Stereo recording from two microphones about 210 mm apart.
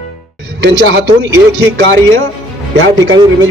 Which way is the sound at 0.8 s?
60° right (ahead or behind).